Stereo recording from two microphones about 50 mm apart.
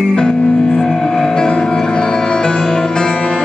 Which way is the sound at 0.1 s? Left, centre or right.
Centre.